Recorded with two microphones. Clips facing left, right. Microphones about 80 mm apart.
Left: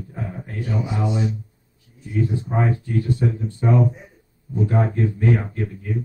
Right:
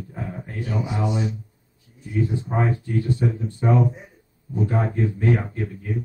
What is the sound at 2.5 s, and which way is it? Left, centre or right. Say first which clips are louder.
A man's voice: left 1 dB; centre.